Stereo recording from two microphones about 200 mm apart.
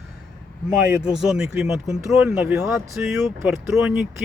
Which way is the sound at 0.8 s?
5° right (ahead or behind).